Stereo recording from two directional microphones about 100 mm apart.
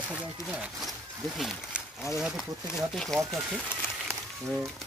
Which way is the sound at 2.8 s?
Centre (ahead or behind).